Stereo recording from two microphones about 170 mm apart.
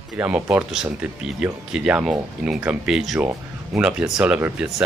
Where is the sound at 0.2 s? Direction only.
10° right (ahead or behind).